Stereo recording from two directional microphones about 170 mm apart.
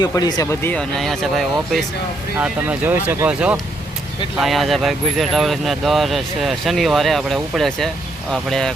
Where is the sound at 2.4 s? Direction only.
10° right (ahead or behind).